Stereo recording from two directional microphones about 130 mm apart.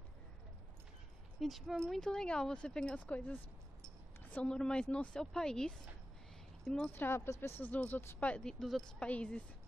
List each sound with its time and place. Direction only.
1.4 s speech: centre (ahead or behind)